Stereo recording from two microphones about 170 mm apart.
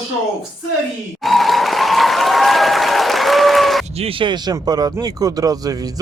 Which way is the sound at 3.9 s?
35° right (ahead or behind).